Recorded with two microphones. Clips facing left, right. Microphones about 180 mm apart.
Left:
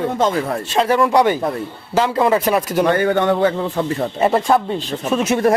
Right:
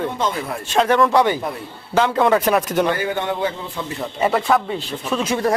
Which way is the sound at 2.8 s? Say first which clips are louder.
Left 6 dB; 55° left (ahead or behind).